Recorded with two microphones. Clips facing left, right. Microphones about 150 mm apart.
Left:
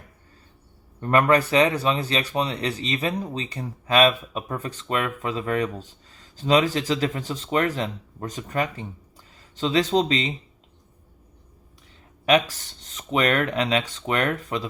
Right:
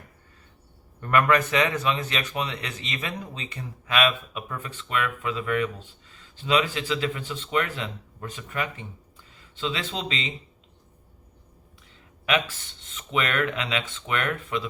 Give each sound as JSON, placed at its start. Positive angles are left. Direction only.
{"t": 1.0, "sound": "speech", "side_deg": 30}
{"t": 12.2, "sound": "speech", "side_deg": 40}